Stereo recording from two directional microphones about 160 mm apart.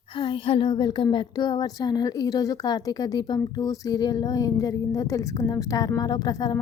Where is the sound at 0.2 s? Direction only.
30° left (ahead or behind).